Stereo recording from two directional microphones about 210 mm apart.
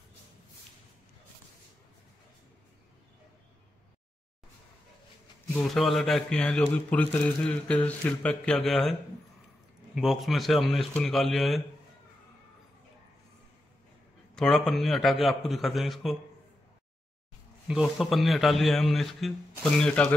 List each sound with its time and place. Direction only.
5.5 s speech: centre (ahead or behind)
9.9 s speech: centre (ahead or behind)
14.3 s speech: centre (ahead or behind)
17.6 s speech: centre (ahead or behind)